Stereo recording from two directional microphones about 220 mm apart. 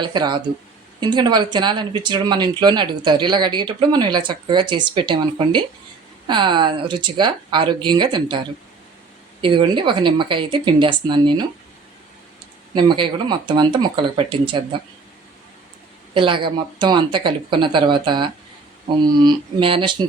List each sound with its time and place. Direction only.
0.0 s speech: 20° right (ahead or behind)
9.4 s speech: 20° right (ahead or behind)
12.7 s speech: 20° right (ahead or behind)
16.1 s speech: 20° right (ahead or behind)